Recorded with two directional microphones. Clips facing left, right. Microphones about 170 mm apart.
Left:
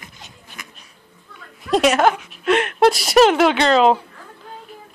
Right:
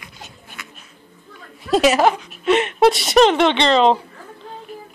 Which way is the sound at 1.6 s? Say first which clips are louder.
Right 1 dB; centre (ahead or behind).